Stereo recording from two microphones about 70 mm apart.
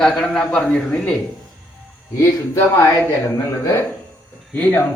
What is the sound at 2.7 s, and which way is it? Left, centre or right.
Speech, left.